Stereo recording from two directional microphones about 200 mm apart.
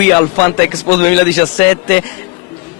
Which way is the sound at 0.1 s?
15° left (ahead or behind).